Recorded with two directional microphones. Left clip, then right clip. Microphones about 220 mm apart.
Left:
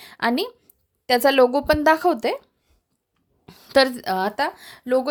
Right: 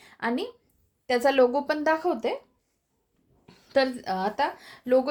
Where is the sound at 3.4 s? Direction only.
50° left (ahead or behind).